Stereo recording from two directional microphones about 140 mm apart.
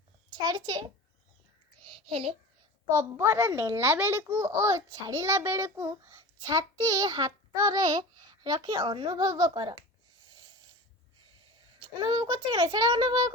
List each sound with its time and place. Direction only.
0.4 s a child's voice: 30° right (ahead or behind)
1.8 s a sound: 40° right (ahead or behind)
2.9 s a child's voice: 25° right (ahead or behind)
11.8 s a child's voice: 30° right (ahead or behind)